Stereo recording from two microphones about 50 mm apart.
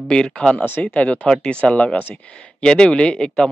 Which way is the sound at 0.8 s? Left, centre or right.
Left.